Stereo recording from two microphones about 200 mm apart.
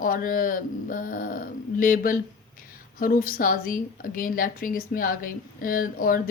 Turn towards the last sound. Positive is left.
turn(degrees=45)  # may be behind; listen again after turning